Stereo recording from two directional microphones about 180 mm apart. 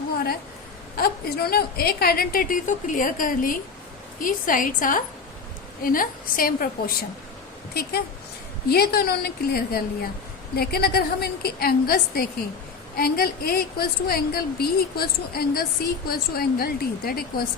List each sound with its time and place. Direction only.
0.9 s a woman's voice: 60° left (ahead or behind)